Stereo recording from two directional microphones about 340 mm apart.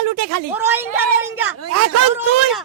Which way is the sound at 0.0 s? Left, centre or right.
Right.